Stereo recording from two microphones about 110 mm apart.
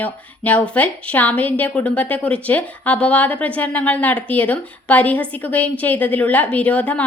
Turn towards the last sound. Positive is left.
turn(degrees=15)  # may be behind; listen again after turning